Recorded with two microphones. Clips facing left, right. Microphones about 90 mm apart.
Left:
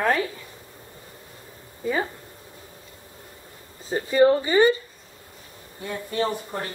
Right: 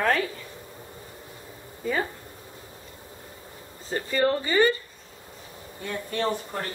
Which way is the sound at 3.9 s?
15° left (ahead or behind).